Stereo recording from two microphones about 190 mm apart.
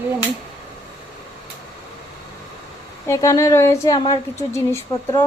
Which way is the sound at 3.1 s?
15° left (ahead or behind).